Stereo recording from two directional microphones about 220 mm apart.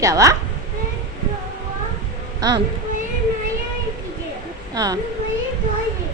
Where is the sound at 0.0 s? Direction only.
15° right (ahead or behind).